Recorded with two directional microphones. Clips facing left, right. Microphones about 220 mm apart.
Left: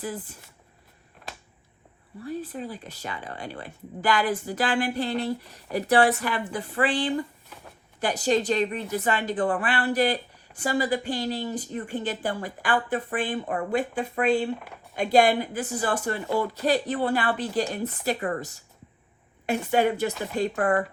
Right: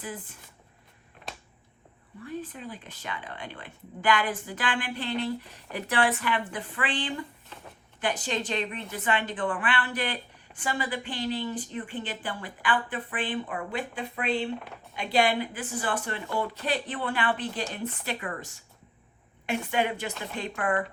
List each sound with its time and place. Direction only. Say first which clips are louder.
0.0 s speech: left 5 dB; 40° left (ahead or behind)
2.2 s speech: left 4 dB; 40° left (ahead or behind)
19.5 s speech: left 5 dB; 40° left (ahead or behind)